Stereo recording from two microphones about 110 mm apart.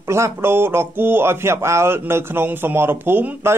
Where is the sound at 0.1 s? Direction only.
25° right (ahead or behind).